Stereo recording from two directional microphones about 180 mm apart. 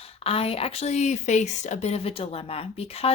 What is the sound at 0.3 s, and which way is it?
A woman's voice, 35° left (ahead or behind).